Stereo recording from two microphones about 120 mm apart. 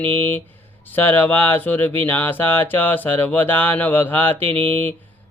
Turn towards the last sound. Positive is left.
turn(degrees=15)  # may be behind; listen again after turning